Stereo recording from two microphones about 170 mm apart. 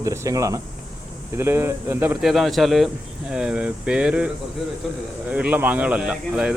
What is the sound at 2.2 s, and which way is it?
Speech, centre (ahead or behind).